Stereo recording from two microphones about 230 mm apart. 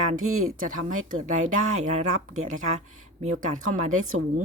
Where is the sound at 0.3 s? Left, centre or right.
Right.